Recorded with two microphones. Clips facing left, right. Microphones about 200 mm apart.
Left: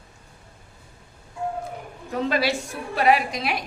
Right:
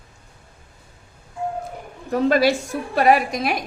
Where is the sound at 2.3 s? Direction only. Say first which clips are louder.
Right 7 dB; 45° right (ahead or behind).